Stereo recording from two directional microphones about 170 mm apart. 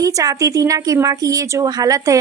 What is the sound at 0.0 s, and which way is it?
Speech, 20° right (ahead or behind).